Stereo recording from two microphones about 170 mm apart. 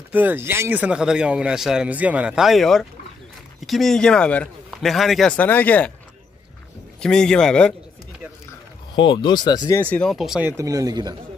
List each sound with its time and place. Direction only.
0.1 s speech: 10° right (ahead or behind); by 5.9 s 10° left (ahead or behind)
7.0 s speech: 5° left (ahead or behind)
8.9 s speech: 30° left (ahead or behind)
9.8 s speech: 5° left (ahead or behind)
10.5 s speech: 20° right (ahead or behind)